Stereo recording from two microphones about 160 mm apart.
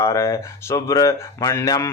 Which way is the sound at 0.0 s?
20° left (ahead or behind).